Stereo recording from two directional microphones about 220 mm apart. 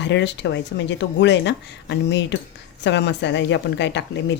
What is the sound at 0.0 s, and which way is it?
Speech, 55° left (ahead or behind).